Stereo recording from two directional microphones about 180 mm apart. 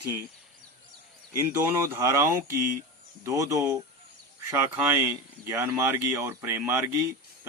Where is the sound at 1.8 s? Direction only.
15° right (ahead or behind).